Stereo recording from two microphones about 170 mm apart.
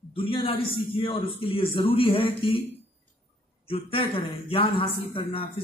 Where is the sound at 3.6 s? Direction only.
35° left (ahead or behind).